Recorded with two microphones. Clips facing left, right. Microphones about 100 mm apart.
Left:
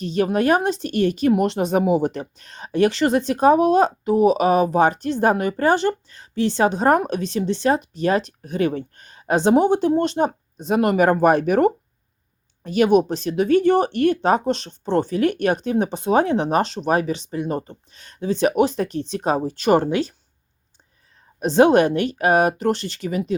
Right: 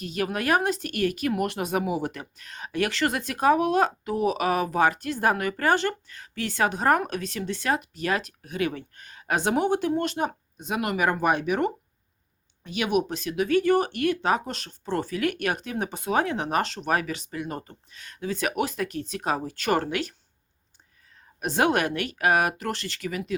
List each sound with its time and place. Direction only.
0.0 s speech: 30° left (ahead or behind)
21.3 s speech: 25° left (ahead or behind)